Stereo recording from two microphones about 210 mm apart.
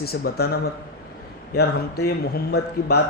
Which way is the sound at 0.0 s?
50° left (ahead or behind).